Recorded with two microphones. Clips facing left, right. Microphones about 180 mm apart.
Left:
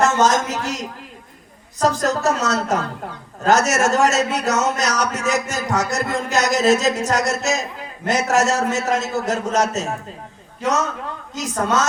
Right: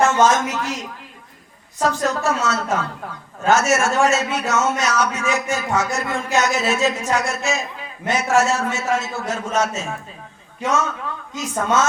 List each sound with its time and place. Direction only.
0.0 s a woman's voice: 40° left (ahead or behind)
11.3 s a man's voice: 40° left (ahead or behind)